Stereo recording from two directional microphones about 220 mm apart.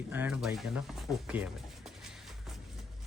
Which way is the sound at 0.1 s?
5° right (ahead or behind).